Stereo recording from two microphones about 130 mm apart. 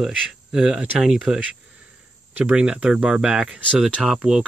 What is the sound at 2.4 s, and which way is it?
Speech, 5° right (ahead or behind).